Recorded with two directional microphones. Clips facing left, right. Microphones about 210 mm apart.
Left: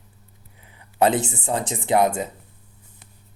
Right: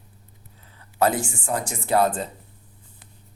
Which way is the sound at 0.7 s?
15° left (ahead or behind).